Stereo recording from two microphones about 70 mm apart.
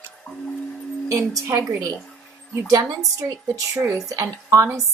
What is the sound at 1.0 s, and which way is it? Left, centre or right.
Speech, right.